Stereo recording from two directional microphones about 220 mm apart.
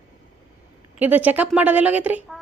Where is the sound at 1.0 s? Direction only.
5° right (ahead or behind).